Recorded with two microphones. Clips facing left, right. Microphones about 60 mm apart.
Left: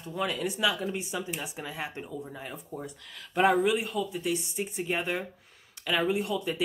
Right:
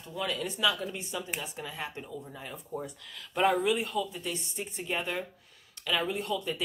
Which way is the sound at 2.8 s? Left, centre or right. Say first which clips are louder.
Even; centre.